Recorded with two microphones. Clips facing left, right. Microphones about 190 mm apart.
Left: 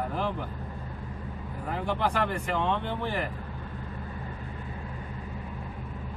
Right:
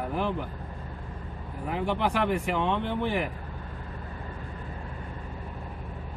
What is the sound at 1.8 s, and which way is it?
Speech, 15° right (ahead or behind).